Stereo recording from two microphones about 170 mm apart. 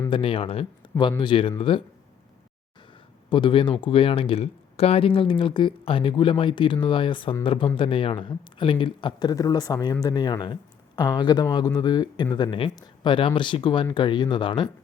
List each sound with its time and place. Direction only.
0.1 s speech: 30° left (ahead or behind)
3.2 s speech: 30° left (ahead or behind)